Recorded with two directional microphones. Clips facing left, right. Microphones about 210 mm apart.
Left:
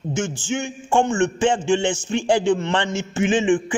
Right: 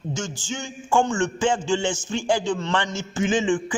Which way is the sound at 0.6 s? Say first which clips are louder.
Left 2 dB; 25° left (ahead or behind).